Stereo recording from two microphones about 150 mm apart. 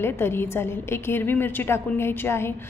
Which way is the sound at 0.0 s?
15° left (ahead or behind).